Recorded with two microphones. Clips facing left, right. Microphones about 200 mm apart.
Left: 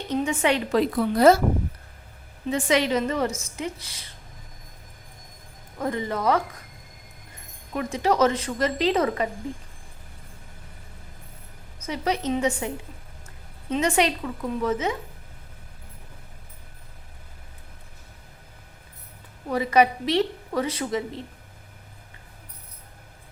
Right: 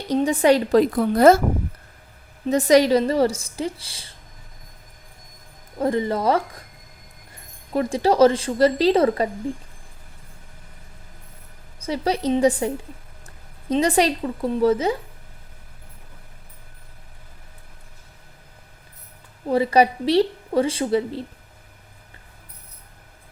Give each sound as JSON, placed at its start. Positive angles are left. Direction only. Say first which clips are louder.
{"t": 0.1, "sound": "a woman's voice", "louder": "right 6 dB", "side_deg": -35}
{"t": 2.5, "sound": "a woman's voice", "louder": "right 7 dB", "side_deg": -40}
{"t": 5.8, "sound": "a woman's voice", "louder": "right 4 dB", "side_deg": -30}
{"t": 7.7, "sound": "a woman's voice", "louder": "right 4 dB", "side_deg": -30}
{"t": 11.8, "sound": "a woman's voice", "louder": "right 4 dB", "side_deg": -30}
{"t": 19.5, "sound": "a woman's voice", "louder": "right 3 dB", "side_deg": -30}